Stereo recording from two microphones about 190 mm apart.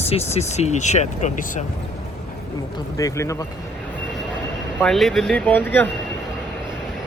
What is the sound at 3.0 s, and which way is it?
Speech, 15° left (ahead or behind).